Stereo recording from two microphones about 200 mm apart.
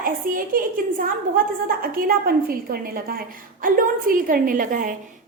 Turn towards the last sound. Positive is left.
turn(degrees=-40)  # may be behind; listen again after turning